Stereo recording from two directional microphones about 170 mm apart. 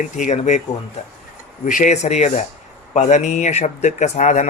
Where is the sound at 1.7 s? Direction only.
45° left (ahead or behind).